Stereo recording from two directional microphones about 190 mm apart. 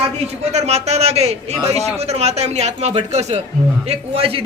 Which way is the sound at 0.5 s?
35° right (ahead or behind).